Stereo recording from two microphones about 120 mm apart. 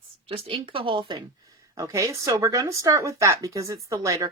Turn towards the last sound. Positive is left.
turn(degrees=-25)  # may be behind; listen again after turning